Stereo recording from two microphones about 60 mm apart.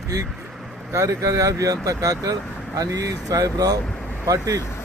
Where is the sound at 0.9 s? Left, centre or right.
Right.